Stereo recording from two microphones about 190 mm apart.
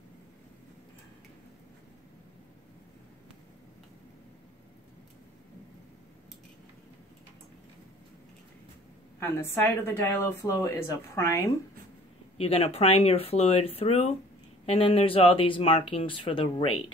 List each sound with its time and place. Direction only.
9.2 s a woman's voice: 10° left (ahead or behind)
12.4 s speech: 30° left (ahead or behind)